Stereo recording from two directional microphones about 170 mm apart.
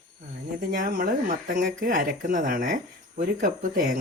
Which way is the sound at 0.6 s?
55° right (ahead or behind).